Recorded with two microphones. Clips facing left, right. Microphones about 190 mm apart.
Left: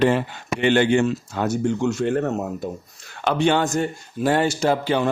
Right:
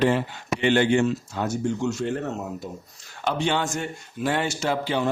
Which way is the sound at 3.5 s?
40° left (ahead or behind).